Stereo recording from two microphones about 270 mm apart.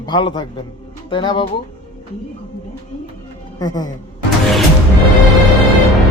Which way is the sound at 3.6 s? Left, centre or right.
Centre.